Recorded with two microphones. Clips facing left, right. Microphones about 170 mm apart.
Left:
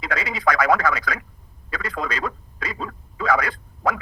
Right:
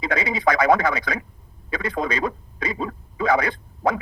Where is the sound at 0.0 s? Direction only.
25° right (ahead or behind).